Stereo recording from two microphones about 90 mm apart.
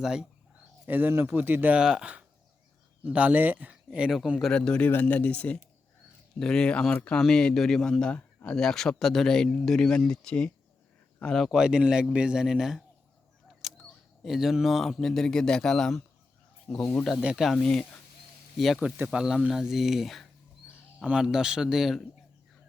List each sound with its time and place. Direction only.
0.0 s speech: 5° right (ahead or behind)
0.9 s speech: 20° right (ahead or behind)
1.8 s speech: 10° right (ahead or behind)
3.9 s a man's voice: 5° right (ahead or behind)
4.5 s speech: 10° left (ahead or behind)
4.9 s a man's voice: 20° left (ahead or behind)
11.4 s speech: 5° right (ahead or behind)
13.6 s a sound: centre (ahead or behind)
14.3 s a man's voice: 5° right (ahead or behind); by 17.0 s 15° left (ahead or behind)
17.2 s speech: 10° right (ahead or behind)
17.5 s a man's voice: 5° left (ahead or behind)